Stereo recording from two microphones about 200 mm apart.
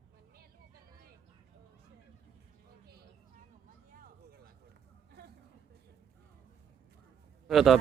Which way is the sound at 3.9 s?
45° right (ahead or behind).